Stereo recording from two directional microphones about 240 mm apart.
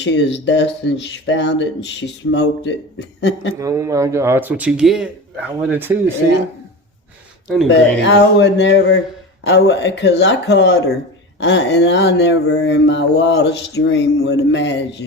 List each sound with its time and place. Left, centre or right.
0.0 s speech: left
3.5 s speech: centre
7.4 s speech: centre
7.7 s speech: left